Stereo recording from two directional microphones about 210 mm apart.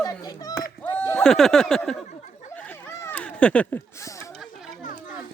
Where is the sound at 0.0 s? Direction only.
20° left (ahead or behind).